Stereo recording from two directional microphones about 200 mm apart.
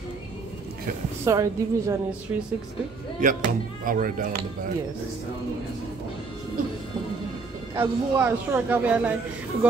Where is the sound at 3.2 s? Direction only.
45° right (ahead or behind).